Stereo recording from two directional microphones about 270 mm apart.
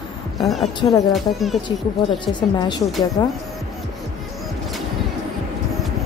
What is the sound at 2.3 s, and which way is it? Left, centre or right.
Speech, centre.